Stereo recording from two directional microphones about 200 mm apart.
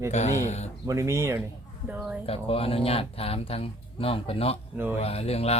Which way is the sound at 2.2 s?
30° left (ahead or behind).